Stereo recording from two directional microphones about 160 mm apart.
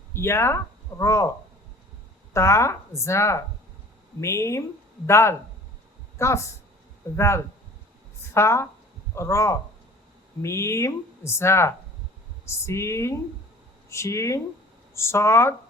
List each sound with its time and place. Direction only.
0.1 s speech: 15° left (ahead or behind)
2.3 s speech: 15° left (ahead or behind)